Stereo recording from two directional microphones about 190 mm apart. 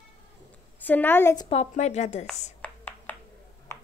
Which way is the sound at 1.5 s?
35° left (ahead or behind).